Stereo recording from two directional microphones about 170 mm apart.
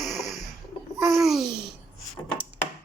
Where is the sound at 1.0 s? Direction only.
Centre (ahead or behind).